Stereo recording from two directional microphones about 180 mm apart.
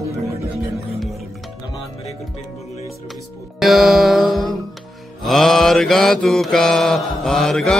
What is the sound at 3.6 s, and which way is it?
Mantra, centre (ahead or behind).